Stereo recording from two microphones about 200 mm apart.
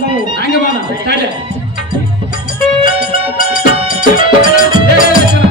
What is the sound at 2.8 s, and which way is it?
Music, 45° left (ahead or behind).